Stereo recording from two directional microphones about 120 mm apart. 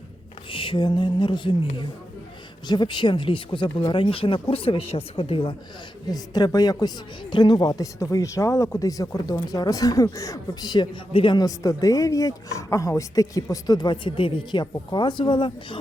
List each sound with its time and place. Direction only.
0.5 s a woman's voice: 45° left (ahead or behind)
6.1 s a woman's voice: 35° left (ahead or behind)